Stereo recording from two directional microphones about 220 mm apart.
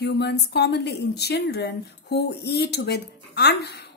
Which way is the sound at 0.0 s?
50° left (ahead or behind).